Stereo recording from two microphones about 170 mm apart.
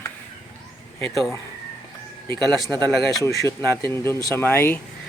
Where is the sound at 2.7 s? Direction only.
25° right (ahead or behind).